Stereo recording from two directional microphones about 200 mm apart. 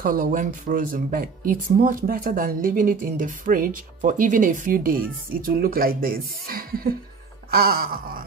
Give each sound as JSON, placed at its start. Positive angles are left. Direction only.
{"t": 0.0, "sound": "speech", "side_deg": -45}